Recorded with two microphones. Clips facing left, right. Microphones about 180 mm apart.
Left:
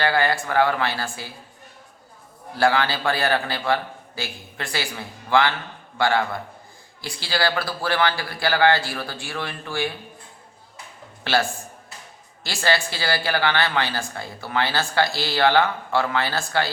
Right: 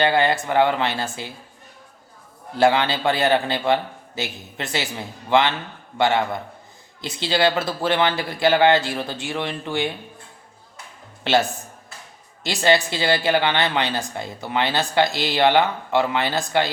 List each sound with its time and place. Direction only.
0.0 s speech: 20° right (ahead or behind)
2.6 s speech: 20° right (ahead or behind)
11.2 s a man's voice: 20° right (ahead or behind)